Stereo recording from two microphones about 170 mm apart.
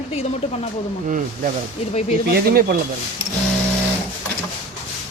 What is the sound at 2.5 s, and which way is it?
Speech, 60° right (ahead or behind).